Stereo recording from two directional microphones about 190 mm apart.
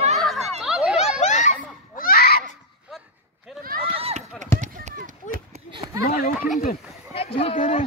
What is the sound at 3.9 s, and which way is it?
Run, 30° right (ahead or behind).